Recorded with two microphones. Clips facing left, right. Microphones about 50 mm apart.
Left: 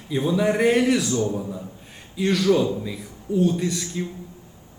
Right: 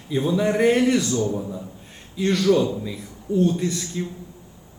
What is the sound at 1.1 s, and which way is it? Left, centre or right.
Speech, left.